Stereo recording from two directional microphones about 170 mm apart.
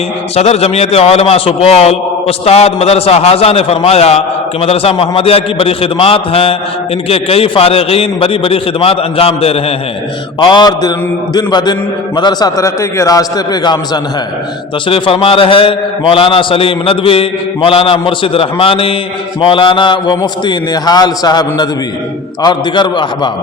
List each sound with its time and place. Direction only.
0.3 s a man's voice: 35° left (ahead or behind)